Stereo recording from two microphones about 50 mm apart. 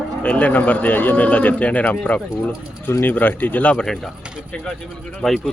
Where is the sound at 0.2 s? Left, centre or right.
Left.